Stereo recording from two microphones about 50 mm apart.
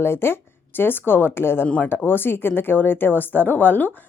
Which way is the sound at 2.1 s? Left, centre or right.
Left.